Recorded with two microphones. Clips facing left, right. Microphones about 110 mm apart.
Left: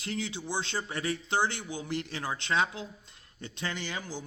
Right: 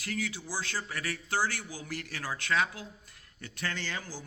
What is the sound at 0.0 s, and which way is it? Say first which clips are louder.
A man's voice: left 1 dB; 25° left (ahead or behind).